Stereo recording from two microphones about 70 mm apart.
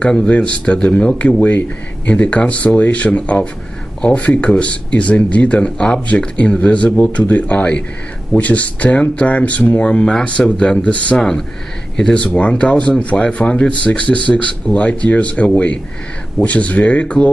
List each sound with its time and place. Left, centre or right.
0.0 s speech: centre
11.1 s speech: centre